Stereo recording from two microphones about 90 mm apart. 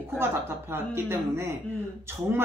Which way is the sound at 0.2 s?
25° right (ahead or behind).